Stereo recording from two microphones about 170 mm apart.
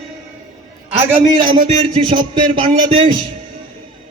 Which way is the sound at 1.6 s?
35° right (ahead or behind).